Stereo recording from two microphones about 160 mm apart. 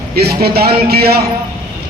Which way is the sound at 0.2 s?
80° right.